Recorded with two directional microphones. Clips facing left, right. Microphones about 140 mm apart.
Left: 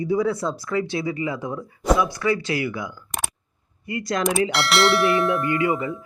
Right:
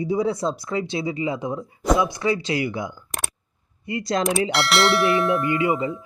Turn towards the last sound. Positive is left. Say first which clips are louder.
# right 1 dB
turn(degrees=-25)  # may be behind; listen again after turning